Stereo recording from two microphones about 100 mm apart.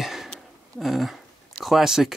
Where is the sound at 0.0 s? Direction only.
Centre (ahead or behind).